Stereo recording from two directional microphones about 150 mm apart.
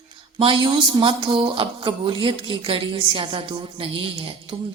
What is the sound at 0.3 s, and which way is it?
A woman's voice, 35° right (ahead or behind).